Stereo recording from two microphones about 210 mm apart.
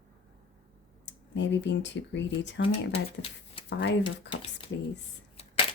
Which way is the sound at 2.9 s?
25° left (ahead or behind).